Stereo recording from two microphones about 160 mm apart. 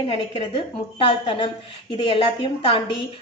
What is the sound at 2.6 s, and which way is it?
Speech, 35° left (ahead or behind).